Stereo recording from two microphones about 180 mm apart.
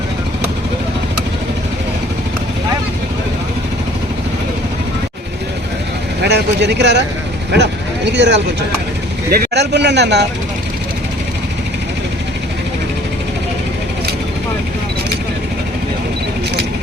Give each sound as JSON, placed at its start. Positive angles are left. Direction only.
{"t": 6.2, "sound": "speech", "side_deg": -70}
{"t": 9.3, "sound": "a man's voice", "side_deg": -65}